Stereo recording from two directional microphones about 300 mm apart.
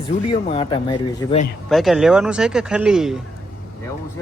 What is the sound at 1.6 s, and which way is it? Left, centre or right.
Speech, centre.